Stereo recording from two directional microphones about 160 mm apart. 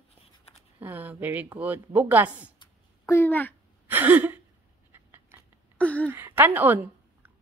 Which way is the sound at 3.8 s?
10° right (ahead or behind).